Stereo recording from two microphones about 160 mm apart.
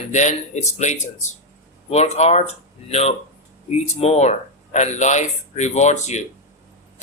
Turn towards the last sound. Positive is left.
turn(degrees=45)  # may be behind; listen again after turning